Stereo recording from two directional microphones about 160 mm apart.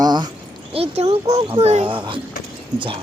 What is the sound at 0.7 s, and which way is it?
Speech, 40° right (ahead or behind).